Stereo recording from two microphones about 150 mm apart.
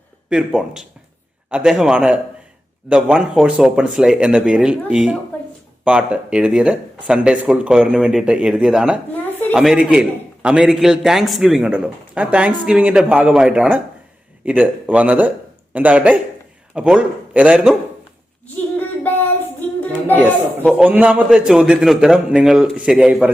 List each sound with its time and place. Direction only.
0.3 s a man's voice: 5° right (ahead or behind)
18.8 s child singing: 10° left (ahead or behind)
19.8 s a child's voice: 10° left (ahead or behind)
20.7 s a man's voice: 5° right (ahead or behind)